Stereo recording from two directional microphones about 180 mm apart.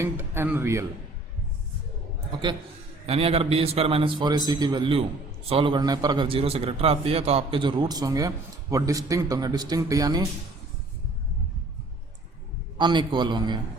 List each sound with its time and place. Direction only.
0.0 s a man's voice: 10° right (ahead or behind)
3.1 s a man's voice: 35° right (ahead or behind)
12.7 s a man's voice: 25° right (ahead or behind)